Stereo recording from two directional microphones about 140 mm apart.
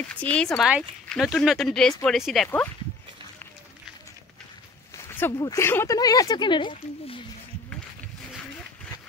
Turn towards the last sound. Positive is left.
turn(degrees=35)  # may be behind; listen again after turning